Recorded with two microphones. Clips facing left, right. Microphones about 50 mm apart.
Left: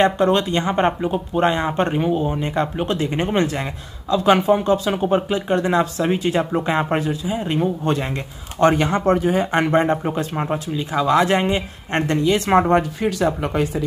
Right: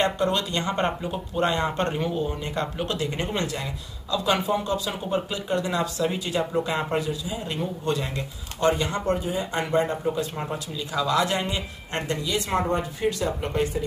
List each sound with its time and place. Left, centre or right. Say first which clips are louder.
0.0 s speech: left 7 dB; left
8.5 s speech: left 7 dB; left
9.0 s speech: left 8 dB; left
12.6 s speech: left 7 dB; left